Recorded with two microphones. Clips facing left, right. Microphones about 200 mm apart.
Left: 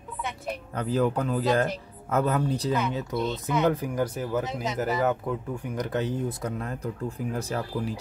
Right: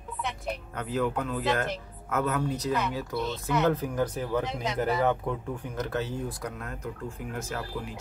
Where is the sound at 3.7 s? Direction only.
10° left (ahead or behind).